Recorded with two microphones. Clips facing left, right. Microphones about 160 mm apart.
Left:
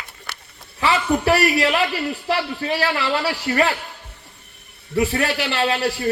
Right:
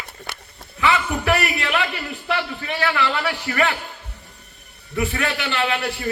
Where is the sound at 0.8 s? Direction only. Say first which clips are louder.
Left 2 dB; 35° left (ahead or behind).